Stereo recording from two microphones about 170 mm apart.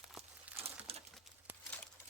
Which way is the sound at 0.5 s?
35° right (ahead or behind).